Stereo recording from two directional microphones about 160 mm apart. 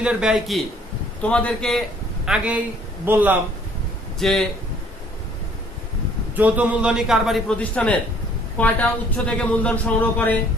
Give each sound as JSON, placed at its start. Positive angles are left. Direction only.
{"t": 0.0, "sound": "a man's voice", "side_deg": -5}
{"t": 1.2, "sound": "speech", "side_deg": 5}
{"t": 2.2, "sound": "a man's voice", "side_deg": -5}
{"t": 4.2, "sound": "a man's voice", "side_deg": 0}
{"t": 6.3, "sound": "a man's voice", "side_deg": -10}